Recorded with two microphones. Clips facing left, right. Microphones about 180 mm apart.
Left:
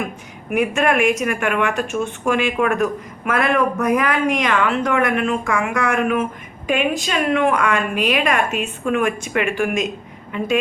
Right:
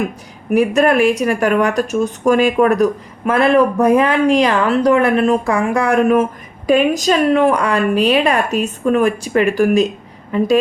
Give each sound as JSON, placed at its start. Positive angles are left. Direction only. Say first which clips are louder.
{"t": 0.5, "sound": "speech", "louder": "right 5 dB", "side_deg": -35}